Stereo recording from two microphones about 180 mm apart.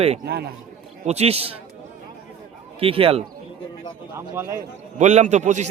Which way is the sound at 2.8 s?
30° right (ahead or behind).